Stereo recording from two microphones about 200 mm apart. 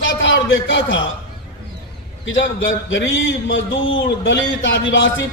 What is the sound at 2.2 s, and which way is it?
A man's voice, 70° left (ahead or behind).